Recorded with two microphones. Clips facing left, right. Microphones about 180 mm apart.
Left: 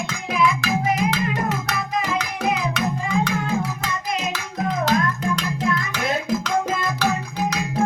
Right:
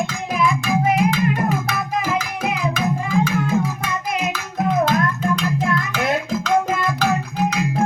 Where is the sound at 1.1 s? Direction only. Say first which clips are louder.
Right 4 dB; 75° left (ahead or behind).